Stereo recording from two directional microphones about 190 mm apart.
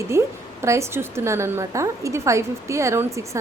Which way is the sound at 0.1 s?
15° right (ahead or behind).